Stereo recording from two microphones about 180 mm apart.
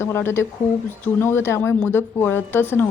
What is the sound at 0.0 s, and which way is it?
A woman's voice, 15° left (ahead or behind).